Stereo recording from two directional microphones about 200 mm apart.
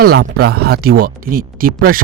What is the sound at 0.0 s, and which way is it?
Speech, 50° right (ahead or behind).